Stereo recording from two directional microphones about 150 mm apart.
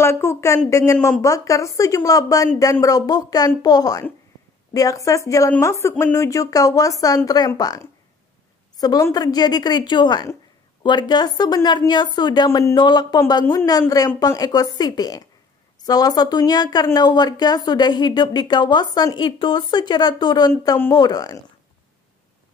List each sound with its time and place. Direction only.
0.0 s a woman's voice: 15° left (ahead or behind)